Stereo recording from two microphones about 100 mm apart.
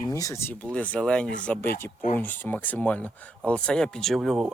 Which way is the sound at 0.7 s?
10° left (ahead or behind).